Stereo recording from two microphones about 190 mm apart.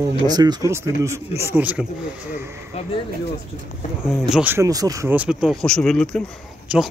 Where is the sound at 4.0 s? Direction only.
5° right (ahead or behind).